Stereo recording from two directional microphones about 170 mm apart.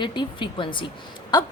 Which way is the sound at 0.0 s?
30° left (ahead or behind).